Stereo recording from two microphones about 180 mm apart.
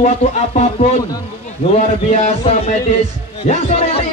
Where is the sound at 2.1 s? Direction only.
35° left (ahead or behind).